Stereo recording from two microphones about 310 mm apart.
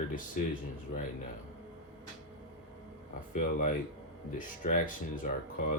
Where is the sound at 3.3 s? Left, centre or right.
Left.